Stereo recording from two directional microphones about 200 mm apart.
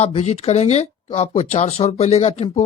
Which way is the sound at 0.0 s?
30° left (ahead or behind).